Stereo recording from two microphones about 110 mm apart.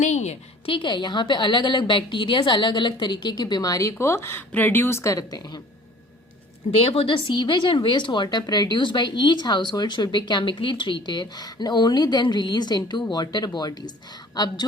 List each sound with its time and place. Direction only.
0.0 s a sound: 90° left
0.6 s a woman's voice: 50° left (ahead or behind)
6.8 s a woman's voice: 60° left (ahead or behind); by 14.6 s 40° left (ahead or behind)